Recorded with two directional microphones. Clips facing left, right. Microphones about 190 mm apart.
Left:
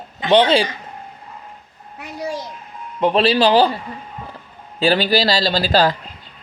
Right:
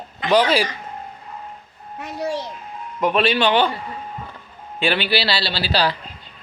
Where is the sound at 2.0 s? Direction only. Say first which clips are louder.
Right 1 dB; 10° left (ahead or behind).